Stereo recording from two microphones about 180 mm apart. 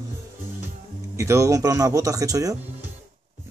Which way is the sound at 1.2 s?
15° right (ahead or behind).